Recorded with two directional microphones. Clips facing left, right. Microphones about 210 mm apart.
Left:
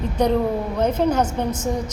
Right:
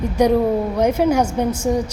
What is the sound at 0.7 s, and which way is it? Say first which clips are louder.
Speech: right 1 dB; 10° right (ahead or behind).